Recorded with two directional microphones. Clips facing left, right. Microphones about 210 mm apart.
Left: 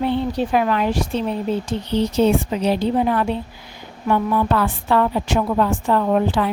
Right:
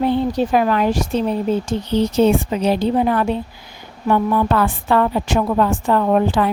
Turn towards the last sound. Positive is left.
turn(degrees=-50)  # may be behind; listen again after turning